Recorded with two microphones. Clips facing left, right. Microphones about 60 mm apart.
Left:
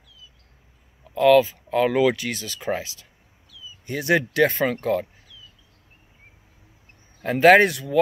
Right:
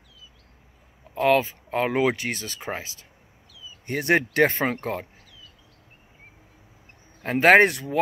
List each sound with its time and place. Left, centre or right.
1.1 s speech: right
7.2 s speech: right